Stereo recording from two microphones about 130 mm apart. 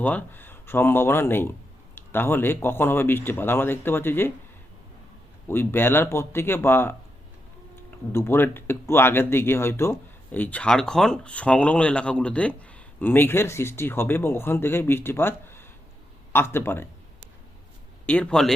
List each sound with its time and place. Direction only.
0.0 s speech: 15° left (ahead or behind)
5.5 s speech: 15° left (ahead or behind)
18.0 s speech: 10° left (ahead or behind)